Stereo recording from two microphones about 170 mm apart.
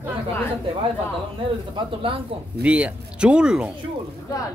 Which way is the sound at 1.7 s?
30° right (ahead or behind).